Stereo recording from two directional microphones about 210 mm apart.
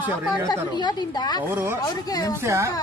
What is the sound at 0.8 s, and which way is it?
Speech, 20° left (ahead or behind).